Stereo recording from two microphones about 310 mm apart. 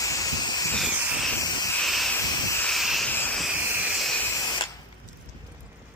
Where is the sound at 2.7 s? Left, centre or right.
Centre.